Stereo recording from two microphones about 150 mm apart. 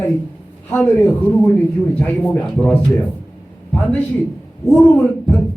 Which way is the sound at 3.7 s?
10° left (ahead or behind).